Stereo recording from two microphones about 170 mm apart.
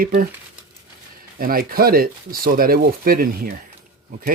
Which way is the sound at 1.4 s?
60° right (ahead or behind).